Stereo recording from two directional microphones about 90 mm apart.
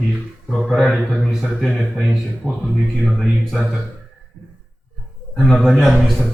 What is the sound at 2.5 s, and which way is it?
Speech, 15° left (ahead or behind).